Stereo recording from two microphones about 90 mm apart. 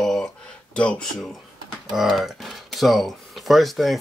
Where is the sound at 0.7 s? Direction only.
15° left (ahead or behind).